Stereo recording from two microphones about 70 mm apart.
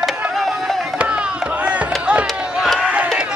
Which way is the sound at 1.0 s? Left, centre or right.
Centre.